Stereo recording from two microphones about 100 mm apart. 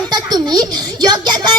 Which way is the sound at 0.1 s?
40° right (ahead or behind).